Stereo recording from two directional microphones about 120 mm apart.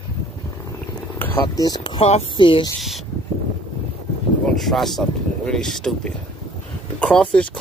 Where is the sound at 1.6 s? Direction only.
35° left (ahead or behind); by 2.2 s 55° left (ahead or behind).